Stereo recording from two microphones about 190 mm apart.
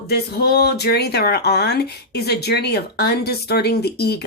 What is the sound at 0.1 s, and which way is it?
Speech, 55° left (ahead or behind).